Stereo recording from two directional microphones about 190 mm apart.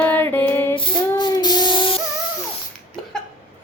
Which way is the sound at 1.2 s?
20° left (ahead or behind).